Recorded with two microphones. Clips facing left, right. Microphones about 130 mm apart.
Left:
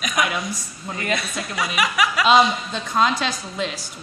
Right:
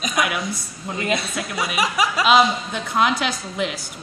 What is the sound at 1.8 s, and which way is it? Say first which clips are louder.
Speech: even; 30° right (ahead or behind).